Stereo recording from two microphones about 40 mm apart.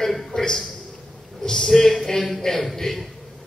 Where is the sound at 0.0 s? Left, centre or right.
Centre.